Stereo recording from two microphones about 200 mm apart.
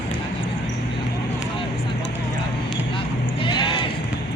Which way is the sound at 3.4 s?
25° left (ahead or behind).